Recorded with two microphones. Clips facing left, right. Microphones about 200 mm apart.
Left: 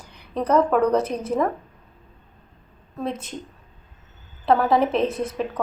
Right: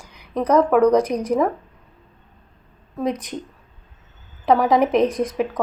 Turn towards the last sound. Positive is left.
turn(degrees=-15)  # may be behind; listen again after turning